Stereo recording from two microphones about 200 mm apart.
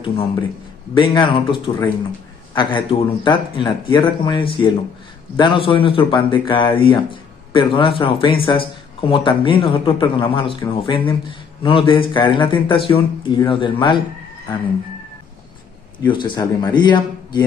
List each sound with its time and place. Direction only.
0.0 s speech: 30° left (ahead or behind)
16.1 s speech: 25° left (ahead or behind)